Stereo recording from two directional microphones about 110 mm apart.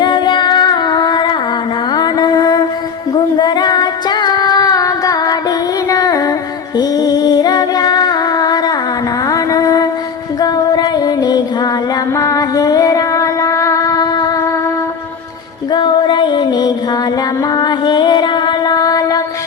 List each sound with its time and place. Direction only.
0.0 s singing: 45° left (ahead or behind)
1.9 s music: 35° left (ahead or behind)
15.7 s music: 40° left (ahead or behind)